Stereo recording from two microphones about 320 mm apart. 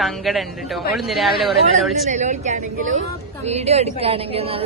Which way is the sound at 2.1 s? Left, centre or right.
Right.